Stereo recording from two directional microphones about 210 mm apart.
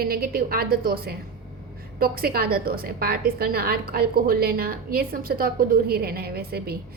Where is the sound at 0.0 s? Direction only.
45° right (ahead or behind).